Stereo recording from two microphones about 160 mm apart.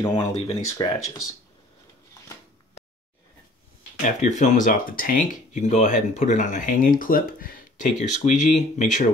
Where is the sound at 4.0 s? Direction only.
50° left (ahead or behind).